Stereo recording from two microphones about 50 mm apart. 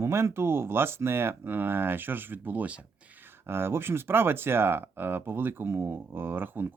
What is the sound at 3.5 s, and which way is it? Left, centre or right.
Speech, right.